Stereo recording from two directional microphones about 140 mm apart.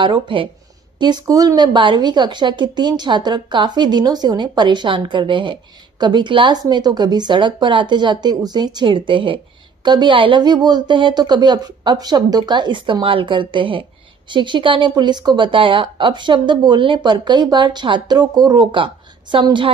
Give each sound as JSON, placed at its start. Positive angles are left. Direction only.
{"t": 0.0, "sound": "a woman's voice", "side_deg": -35}